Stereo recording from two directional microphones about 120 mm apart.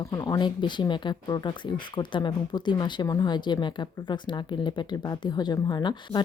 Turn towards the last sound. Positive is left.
turn(degrees=40)  # may be behind; listen again after turning